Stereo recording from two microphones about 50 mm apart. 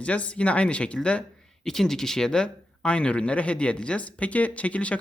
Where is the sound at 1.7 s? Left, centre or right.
Centre.